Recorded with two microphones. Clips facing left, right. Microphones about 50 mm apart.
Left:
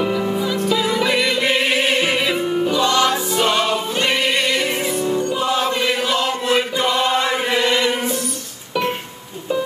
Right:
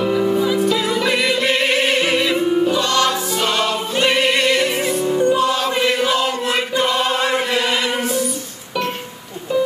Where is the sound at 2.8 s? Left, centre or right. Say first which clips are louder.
Left 1 dB; centre.